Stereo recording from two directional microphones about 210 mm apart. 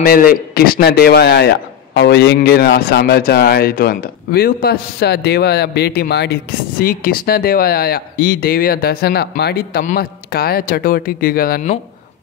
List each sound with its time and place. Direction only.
0.0 s a man's voice: 45° left (ahead or behind)